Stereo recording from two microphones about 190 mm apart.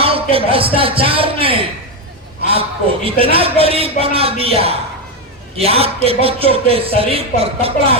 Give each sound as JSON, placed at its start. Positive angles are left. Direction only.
{"t": 0.0, "sound": "speech", "side_deg": -30}